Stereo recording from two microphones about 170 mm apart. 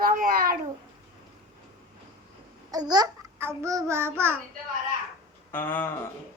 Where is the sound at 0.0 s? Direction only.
55° right (ahead or behind).